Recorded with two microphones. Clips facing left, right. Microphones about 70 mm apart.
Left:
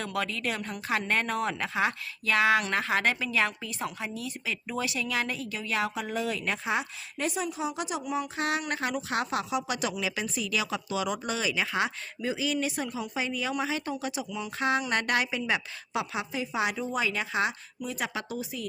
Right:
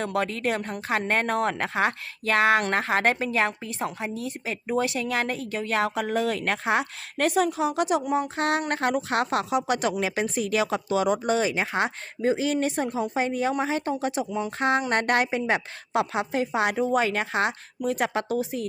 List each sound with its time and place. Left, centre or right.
0.0 s a woman's voice: right